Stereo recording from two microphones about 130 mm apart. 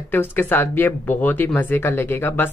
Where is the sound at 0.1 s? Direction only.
15° left (ahead or behind).